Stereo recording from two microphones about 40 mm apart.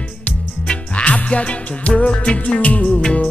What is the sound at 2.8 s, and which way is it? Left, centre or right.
Music, left.